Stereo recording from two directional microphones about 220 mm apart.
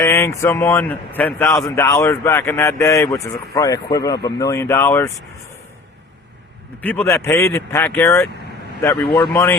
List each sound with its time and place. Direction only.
0.0 s a man's voice: 15° left (ahead or behind)
6.8 s a man's voice: 10° left (ahead or behind)
9.0 s speech: 20° left (ahead or behind)
9.3 s a man's voice: 10° left (ahead or behind)